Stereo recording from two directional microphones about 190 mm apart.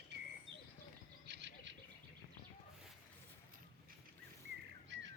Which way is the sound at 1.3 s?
65° right (ahead or behind).